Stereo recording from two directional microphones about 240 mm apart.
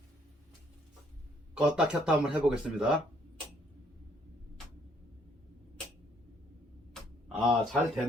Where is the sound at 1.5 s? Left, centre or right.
Centre.